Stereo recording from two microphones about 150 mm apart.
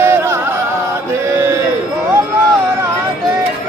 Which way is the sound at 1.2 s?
20° right (ahead or behind).